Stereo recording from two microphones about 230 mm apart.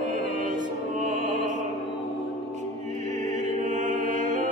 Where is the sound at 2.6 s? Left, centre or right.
Right.